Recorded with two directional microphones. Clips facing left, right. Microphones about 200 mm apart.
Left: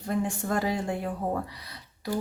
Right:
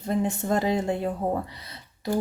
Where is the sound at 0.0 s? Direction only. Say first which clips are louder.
Right 3 dB; 20° right (ahead or behind).